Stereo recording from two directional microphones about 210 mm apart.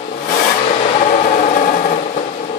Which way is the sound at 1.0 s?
35° left (ahead or behind).